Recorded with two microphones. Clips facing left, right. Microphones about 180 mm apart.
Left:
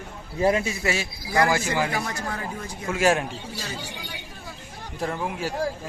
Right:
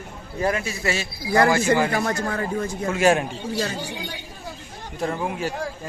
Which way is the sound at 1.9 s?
55° right (ahead or behind).